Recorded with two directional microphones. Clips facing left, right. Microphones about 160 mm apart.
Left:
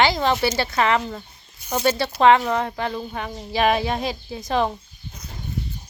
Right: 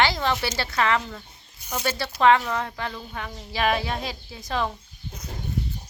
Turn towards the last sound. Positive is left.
turn(degrees=25)  # may be behind; listen again after turning